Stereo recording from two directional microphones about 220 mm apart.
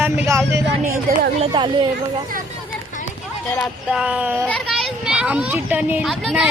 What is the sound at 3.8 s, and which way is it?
A child's voice, 5° right (ahead or behind).